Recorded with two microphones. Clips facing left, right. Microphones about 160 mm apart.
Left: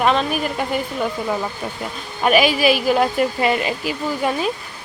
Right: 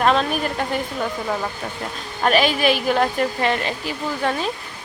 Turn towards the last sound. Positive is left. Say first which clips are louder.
# left 2 dB
turn(degrees=10)  # may be behind; listen again after turning